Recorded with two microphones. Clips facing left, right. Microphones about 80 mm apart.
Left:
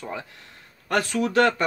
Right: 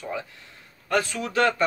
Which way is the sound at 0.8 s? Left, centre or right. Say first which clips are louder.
Left 2 dB; left.